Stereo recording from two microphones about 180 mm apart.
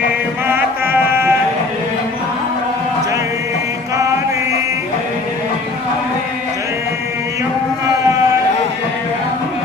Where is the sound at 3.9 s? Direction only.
20° right (ahead or behind).